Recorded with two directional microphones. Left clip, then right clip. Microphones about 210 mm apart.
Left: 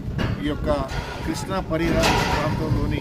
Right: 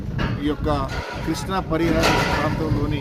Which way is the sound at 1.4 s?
Centre (ahead or behind).